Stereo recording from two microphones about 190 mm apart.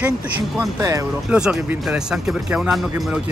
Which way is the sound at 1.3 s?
5° right (ahead or behind).